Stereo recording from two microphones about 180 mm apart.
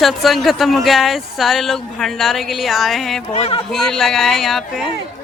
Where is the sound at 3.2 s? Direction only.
35° left (ahead or behind).